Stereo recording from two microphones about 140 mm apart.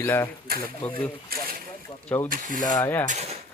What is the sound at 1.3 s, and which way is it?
Boat, 90° right.